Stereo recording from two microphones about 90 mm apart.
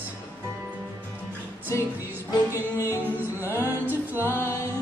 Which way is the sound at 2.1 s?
25° right (ahead or behind).